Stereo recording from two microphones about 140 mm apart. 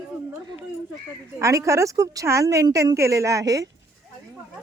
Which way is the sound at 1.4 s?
20° right (ahead or behind).